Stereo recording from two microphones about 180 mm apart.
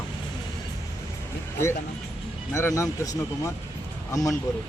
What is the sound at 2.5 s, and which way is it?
Speech, 15° left (ahead or behind).